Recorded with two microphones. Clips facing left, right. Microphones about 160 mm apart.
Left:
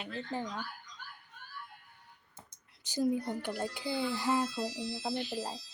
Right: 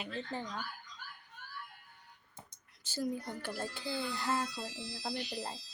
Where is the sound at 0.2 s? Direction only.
10° left (ahead or behind).